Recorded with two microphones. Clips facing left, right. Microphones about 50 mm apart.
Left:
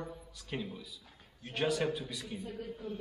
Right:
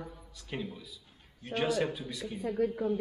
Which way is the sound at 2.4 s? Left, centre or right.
Right.